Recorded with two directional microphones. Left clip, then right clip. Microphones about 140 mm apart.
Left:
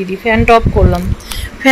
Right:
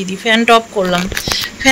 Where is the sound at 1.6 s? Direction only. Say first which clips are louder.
Left 2 dB; 30° left (ahead or behind).